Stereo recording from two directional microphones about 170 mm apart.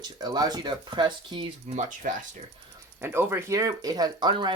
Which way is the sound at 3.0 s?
15° right (ahead or behind).